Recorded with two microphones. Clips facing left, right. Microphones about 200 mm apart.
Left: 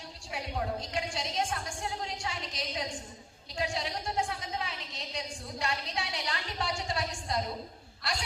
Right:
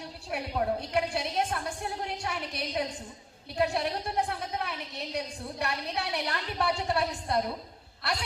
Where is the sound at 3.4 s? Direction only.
60° right (ahead or behind).